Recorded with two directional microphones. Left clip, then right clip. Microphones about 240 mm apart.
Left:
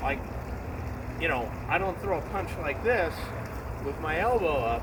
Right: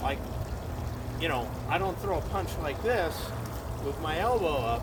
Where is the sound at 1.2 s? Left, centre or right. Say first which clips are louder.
Left 2 dB; centre.